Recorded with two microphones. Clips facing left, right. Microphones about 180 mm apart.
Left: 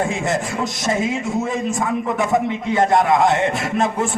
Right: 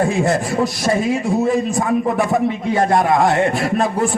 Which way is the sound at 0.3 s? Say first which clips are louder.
Right 4 dB; 20° left (ahead or behind).